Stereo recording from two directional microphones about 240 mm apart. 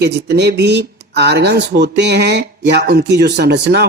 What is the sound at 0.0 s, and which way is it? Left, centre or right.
Speech, right.